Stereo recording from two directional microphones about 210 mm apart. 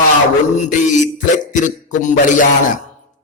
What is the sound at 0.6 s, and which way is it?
A man's voice, 35° left (ahead or behind).